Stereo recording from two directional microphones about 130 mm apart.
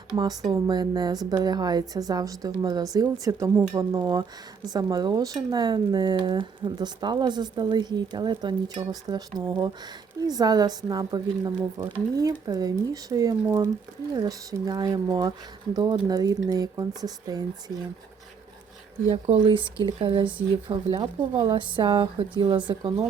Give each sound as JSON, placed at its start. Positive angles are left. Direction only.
{"t": 0.2, "sound": "a woman's voice", "side_deg": -30}
{"t": 3.9, "sound": "a woman's voice", "side_deg": -35}
{"t": 19.0, "sound": "speech", "side_deg": -50}